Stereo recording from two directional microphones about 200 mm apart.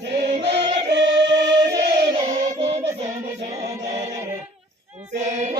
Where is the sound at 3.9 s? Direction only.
35° right (ahead or behind).